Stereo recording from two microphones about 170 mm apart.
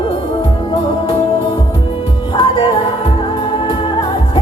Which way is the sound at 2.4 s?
30° left (ahead or behind).